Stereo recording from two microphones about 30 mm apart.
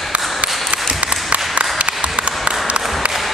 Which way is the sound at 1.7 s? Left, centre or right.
Right.